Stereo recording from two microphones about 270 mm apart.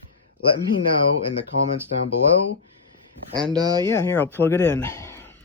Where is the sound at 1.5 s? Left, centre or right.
Left.